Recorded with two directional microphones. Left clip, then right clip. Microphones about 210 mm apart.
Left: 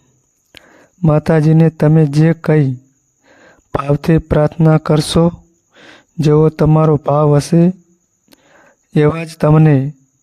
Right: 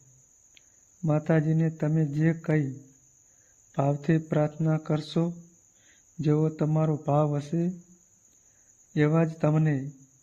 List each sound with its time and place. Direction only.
1.0 s a man's voice: 45° left (ahead or behind)
3.8 s a man's voice: 50° left (ahead or behind)
8.9 s a man's voice: 45° left (ahead or behind)